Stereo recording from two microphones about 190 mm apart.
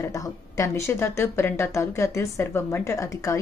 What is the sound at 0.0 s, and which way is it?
Speech, 15° left (ahead or behind).